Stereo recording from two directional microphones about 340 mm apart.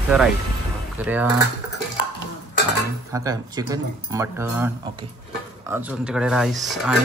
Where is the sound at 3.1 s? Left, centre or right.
Centre.